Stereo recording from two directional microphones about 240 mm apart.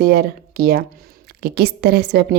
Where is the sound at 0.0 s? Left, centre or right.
Right.